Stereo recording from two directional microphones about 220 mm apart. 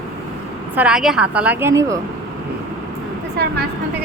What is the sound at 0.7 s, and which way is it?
A woman's voice, 5° right (ahead or behind).